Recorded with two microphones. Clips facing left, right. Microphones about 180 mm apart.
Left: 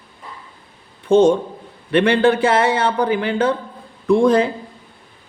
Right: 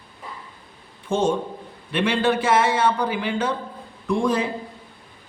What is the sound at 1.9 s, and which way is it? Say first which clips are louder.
Speech: left 7 dB; 60° left (ahead or behind).